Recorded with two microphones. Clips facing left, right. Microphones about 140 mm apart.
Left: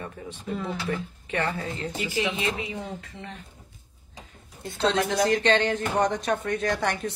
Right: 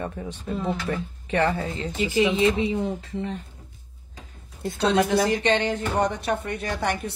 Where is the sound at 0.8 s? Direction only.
30° right (ahead or behind).